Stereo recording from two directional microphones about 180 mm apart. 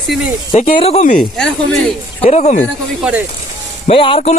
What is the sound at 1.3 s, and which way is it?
Speech, 5° left (ahead or behind).